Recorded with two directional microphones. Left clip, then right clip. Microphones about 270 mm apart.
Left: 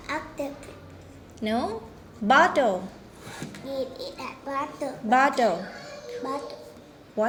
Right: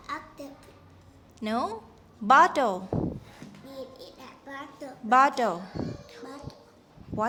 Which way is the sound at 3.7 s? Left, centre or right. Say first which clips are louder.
Left 11 dB; centre.